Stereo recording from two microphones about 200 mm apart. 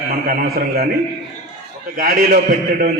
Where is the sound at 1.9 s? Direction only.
45° right (ahead or behind).